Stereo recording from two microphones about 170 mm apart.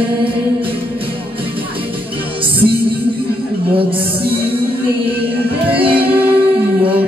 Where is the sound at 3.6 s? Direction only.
30° right (ahead or behind).